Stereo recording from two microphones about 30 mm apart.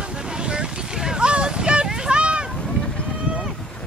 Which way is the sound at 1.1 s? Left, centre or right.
Right.